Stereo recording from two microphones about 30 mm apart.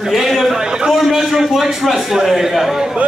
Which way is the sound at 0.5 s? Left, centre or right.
Right.